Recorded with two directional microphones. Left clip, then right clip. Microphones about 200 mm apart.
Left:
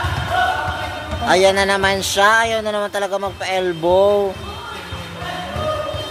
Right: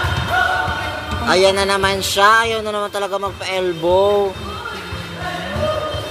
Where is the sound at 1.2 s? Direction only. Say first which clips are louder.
Even; 25° left (ahead or behind).